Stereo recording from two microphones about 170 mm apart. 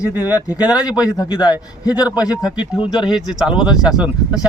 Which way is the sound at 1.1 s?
25° left (ahead or behind).